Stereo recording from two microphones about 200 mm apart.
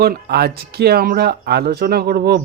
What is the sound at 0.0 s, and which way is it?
Speech, 50° right (ahead or behind).